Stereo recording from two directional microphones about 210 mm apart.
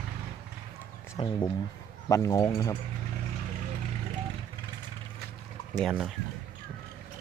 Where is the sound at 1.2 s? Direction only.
25° left (ahead or behind).